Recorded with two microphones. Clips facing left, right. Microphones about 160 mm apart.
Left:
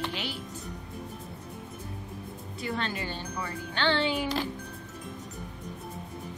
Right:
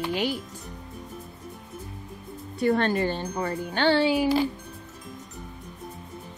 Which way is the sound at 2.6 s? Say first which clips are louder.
Right 11 dB; 50° right (ahead or behind).